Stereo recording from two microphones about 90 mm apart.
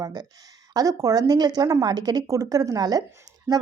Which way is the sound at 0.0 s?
50° right (ahead or behind).